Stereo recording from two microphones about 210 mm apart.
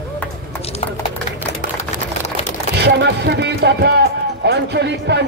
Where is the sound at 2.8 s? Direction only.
55° right (ahead or behind).